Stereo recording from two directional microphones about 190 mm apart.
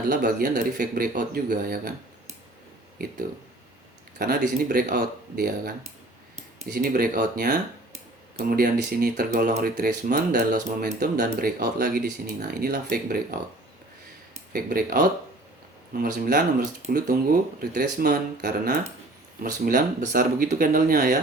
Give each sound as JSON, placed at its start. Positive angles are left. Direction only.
{"t": 0.1, "sound": "speech", "side_deg": -50}
{"t": 4.2, "sound": "speech", "side_deg": -55}
{"t": 14.5, "sound": "speech", "side_deg": -50}